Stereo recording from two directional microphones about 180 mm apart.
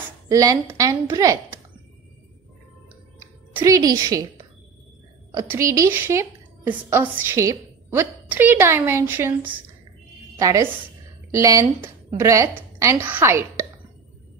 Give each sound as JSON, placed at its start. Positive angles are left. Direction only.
{"t": 0.3, "sound": "a woman's voice", "side_deg": -20}
{"t": 3.5, "sound": "a woman's voice", "side_deg": -20}
{"t": 5.3, "sound": "a woman's voice", "side_deg": -15}